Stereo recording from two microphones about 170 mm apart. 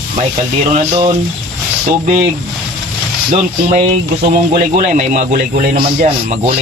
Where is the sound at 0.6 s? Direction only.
50° right (ahead or behind).